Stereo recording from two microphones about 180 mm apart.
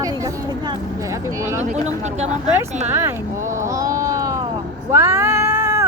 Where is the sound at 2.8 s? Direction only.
15° right (ahead or behind).